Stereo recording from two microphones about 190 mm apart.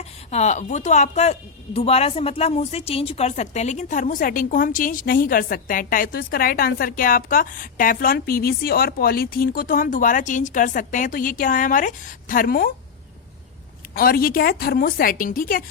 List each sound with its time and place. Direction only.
0.0 s speech: 35° left (ahead or behind)
13.9 s speech: 50° left (ahead or behind)